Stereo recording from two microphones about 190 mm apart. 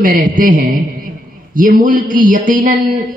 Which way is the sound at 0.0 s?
45° right (ahead or behind).